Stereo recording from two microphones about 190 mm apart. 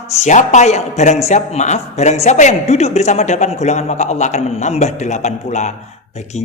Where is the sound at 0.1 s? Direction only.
40° left (ahead or behind).